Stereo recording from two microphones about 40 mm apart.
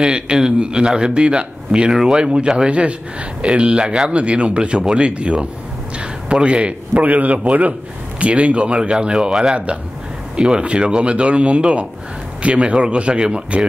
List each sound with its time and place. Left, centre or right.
0.0 s a man's voice: right